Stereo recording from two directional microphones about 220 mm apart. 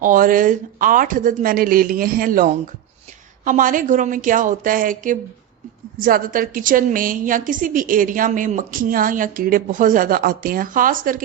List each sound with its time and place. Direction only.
0.0 s a woman's voice: 40° right (ahead or behind)